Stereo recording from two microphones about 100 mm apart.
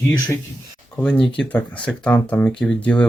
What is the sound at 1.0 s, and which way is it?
Speech, 10° left (ahead or behind).